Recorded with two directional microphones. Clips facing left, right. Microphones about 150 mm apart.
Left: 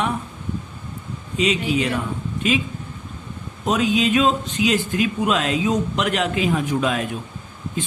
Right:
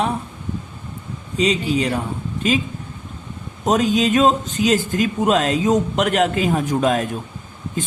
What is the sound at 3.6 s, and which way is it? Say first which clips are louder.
Speech: right 2 dB; 40° right (ahead or behind).